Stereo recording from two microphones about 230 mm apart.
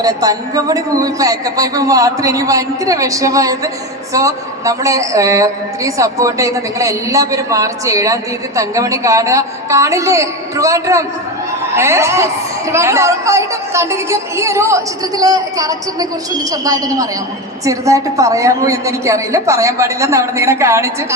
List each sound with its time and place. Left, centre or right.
0.0 s a woman's voice: centre